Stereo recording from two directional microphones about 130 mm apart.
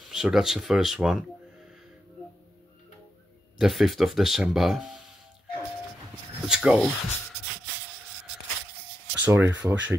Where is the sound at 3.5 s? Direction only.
Centre (ahead or behind).